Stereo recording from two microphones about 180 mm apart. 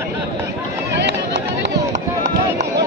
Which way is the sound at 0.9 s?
75° right (ahead or behind).